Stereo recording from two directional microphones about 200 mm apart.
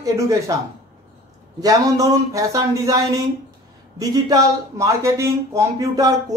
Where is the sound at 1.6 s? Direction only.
15° right (ahead or behind).